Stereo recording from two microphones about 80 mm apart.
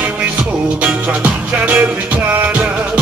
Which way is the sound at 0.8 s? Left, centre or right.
Centre.